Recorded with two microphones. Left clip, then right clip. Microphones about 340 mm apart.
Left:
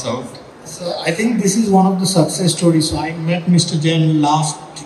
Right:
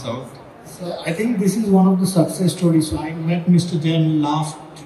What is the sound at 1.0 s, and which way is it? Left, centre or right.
A man's voice, left.